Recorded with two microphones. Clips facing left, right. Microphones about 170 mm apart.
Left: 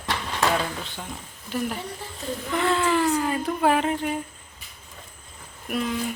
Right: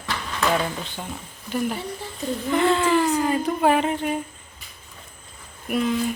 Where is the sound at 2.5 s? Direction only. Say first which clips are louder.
Right 3 dB; centre (ahead or behind).